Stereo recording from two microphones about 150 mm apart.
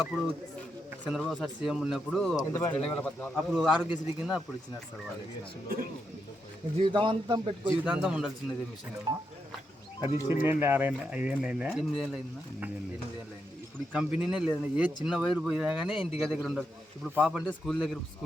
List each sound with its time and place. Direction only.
0.0 s a man's voice: centre (ahead or behind)
2.3 s speech: 25° left (ahead or behind)
2.8 s a man's voice: 10° left (ahead or behind)
3.8 s a man's voice: 5° right (ahead or behind)
6.7 s a man's voice: 35° right (ahead or behind)
7.9 s a man's voice: 5° right (ahead or behind)
10.4 s a man's voice: 15° right (ahead or behind)
13.7 s a man's voice: 10° right (ahead or behind)